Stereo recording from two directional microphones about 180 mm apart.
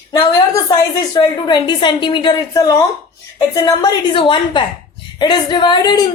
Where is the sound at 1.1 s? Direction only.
20° left (ahead or behind).